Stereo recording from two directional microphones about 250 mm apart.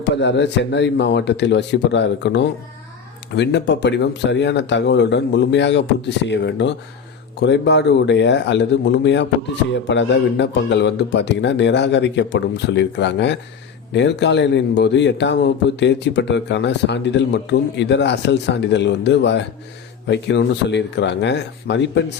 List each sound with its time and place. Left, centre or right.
0.0 s speech: left